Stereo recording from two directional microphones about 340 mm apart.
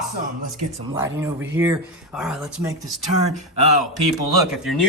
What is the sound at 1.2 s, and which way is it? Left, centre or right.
A man's voice, centre.